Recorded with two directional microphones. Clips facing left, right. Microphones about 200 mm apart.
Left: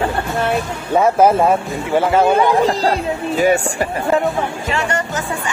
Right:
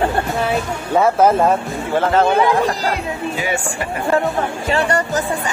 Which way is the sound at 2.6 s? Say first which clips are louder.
Left 4 dB; 30° left (ahead or behind).